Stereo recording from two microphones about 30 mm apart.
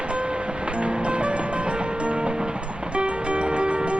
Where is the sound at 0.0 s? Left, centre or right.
Right.